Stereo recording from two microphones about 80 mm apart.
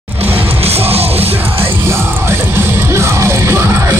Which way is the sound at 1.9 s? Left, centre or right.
Right.